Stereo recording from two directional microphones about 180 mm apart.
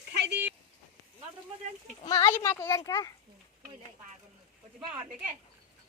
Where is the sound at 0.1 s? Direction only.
70° right (ahead or behind).